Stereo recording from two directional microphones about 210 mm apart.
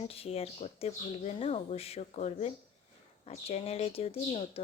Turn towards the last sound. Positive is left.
turn(degrees=30)  # may be behind; listen again after turning